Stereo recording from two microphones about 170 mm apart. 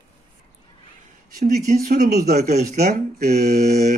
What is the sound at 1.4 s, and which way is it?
Speech, 45° right (ahead or behind).